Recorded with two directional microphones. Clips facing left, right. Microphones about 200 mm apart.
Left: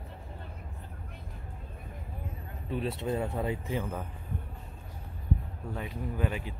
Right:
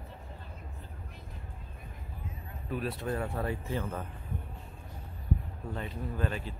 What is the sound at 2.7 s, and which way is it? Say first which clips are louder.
Speech: left 2 dB; 25° left (ahead or behind).